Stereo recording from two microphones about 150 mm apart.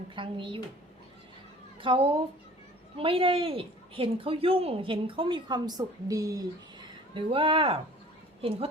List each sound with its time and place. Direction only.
0.2 s a woman's voice: 35° right (ahead or behind)
1.8 s a woman's voice: 35° right (ahead or behind)
7.1 s a woman's voice: 35° right (ahead or behind)